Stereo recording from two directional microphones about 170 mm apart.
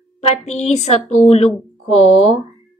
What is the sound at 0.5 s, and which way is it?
A woman's voice, 40° left (ahead or behind).